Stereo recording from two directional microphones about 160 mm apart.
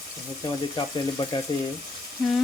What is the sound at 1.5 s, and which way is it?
Frying, 30° left (ahead or behind).